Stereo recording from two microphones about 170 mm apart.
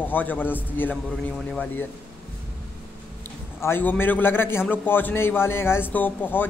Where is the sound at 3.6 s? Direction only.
10° left (ahead or behind).